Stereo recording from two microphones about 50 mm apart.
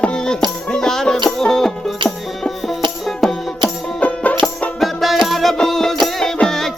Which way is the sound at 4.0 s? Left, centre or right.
Left.